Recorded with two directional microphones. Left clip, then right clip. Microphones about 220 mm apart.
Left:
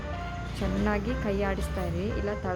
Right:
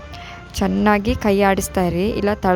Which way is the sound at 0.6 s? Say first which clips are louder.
Right 13 dB; 50° right (ahead or behind).